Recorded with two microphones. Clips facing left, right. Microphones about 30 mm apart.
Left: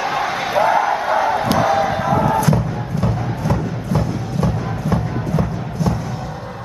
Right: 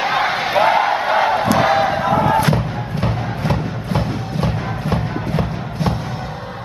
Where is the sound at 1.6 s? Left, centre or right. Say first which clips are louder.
Right 1 dB; right.